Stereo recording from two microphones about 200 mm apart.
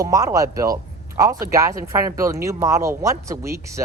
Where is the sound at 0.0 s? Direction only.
15° right (ahead or behind).